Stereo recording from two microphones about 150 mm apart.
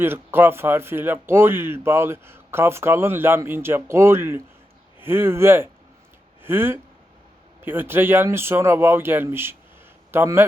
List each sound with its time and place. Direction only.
0.0 s a man's voice: 15° right (ahead or behind)